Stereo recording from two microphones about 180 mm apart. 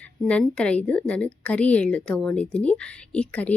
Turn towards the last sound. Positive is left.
turn(degrees=10)  # may be behind; listen again after turning